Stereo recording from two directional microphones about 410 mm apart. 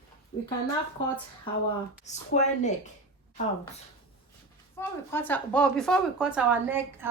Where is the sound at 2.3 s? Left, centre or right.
Centre.